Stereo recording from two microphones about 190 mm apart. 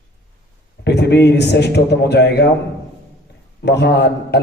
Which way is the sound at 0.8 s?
60° left (ahead or behind).